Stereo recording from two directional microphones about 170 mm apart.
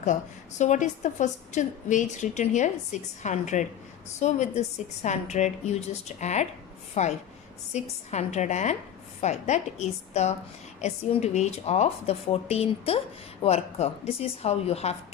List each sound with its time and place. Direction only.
0.0 s a woman's voice: 45° left (ahead or behind)